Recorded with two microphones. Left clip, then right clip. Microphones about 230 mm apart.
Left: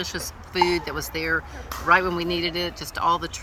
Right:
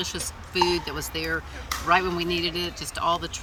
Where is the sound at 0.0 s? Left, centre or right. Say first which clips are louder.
Left 1 dB; centre.